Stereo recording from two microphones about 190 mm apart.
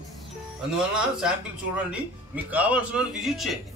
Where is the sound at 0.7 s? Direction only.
5° right (ahead or behind).